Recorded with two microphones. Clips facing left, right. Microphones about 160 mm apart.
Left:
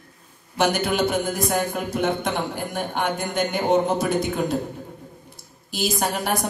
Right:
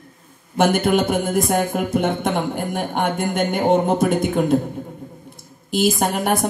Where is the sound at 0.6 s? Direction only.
50° right (ahead or behind).